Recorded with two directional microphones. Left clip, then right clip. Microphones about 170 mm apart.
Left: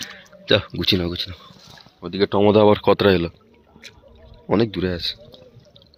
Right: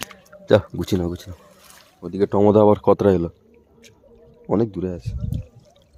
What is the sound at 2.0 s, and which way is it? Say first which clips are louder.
Speech: even; 15° right (ahead or behind).